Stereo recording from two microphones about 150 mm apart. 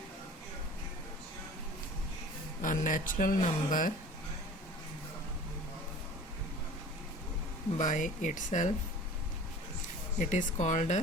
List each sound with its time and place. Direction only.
2.6 s speech: 60° left (ahead or behind)
7.8 s speech: 55° left (ahead or behind)
10.2 s speech: 55° left (ahead or behind)